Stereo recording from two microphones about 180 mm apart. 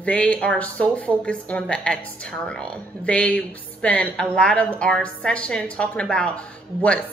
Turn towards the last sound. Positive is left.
turn(degrees=5)  # may be behind; listen again after turning